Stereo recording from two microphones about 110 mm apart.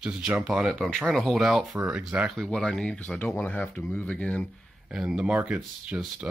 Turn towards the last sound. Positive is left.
turn(degrees=-10)  # may be behind; listen again after turning